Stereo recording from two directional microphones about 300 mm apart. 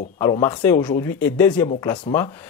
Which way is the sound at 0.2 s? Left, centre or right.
Centre.